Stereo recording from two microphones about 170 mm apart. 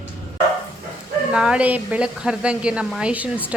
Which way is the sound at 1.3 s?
5° right (ahead or behind).